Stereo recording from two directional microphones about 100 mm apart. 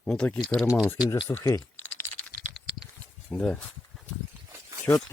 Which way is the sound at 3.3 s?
5° left (ahead or behind).